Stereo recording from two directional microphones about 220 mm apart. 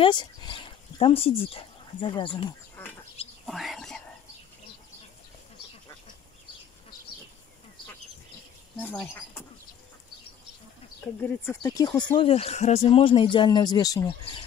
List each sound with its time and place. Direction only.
0.0 s speech: 20° left (ahead or behind)
2.8 s a sound: 10° left (ahead or behind)
3.4 s whispering: centre (ahead or behind)
8.7 s speech: 10° left (ahead or behind)
11.1 s speech: 10° left (ahead or behind)